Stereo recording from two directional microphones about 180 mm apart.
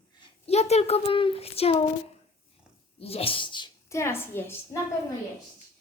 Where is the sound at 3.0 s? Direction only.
35° left (ahead or behind); by 4.8 s 15° left (ahead or behind).